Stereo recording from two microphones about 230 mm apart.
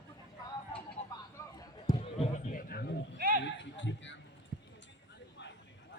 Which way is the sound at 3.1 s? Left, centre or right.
Right.